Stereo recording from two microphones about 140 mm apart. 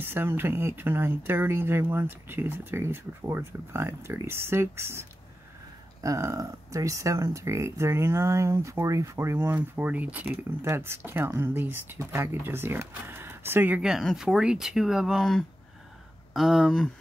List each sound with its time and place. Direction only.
0.0 s speech: 15° right (ahead or behind)
6.0 s speech: 20° right (ahead or behind); by 16.9 s centre (ahead or behind)